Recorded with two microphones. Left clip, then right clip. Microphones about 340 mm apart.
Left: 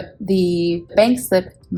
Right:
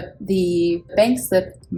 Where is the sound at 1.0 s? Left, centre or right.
Left.